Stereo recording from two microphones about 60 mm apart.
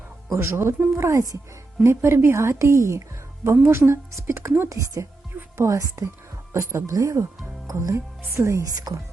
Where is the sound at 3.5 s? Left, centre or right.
Right.